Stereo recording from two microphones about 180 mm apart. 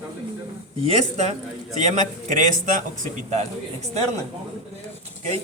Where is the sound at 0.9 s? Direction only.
40° right (ahead or behind).